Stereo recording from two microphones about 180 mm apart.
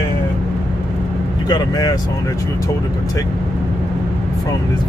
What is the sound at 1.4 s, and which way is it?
Speech, 20° left (ahead or behind).